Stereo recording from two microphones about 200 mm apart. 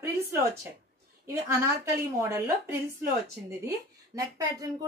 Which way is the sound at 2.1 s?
15° right (ahead or behind).